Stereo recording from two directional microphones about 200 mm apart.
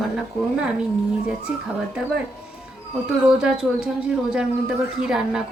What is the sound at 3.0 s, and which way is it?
Speech, 5° right (ahead or behind).